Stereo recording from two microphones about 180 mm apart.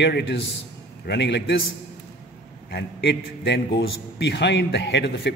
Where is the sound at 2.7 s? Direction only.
70° left (ahead or behind).